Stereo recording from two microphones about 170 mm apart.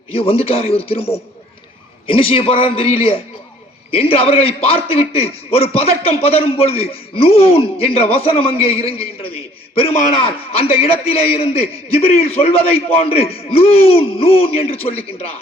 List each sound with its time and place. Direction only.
0.2 s a man's voice: 35° left (ahead or behind)
2.0 s a man's voice: 30° left (ahead or behind)